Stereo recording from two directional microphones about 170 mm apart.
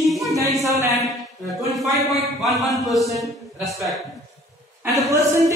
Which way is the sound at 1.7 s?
Centre (ahead or behind).